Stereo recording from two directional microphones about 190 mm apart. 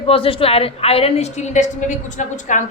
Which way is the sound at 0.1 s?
30° left (ahead or behind).